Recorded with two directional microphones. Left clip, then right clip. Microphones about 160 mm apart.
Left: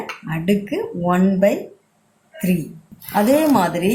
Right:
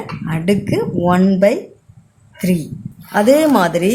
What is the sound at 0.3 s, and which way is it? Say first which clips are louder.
Speech: right 4 dB; 50° right (ahead or behind).